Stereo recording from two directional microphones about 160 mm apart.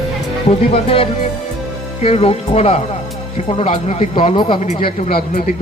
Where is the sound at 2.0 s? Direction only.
40° left (ahead or behind).